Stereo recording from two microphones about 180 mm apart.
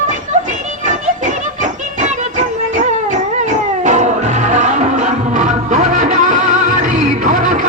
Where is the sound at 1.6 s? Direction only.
45° right (ahead or behind).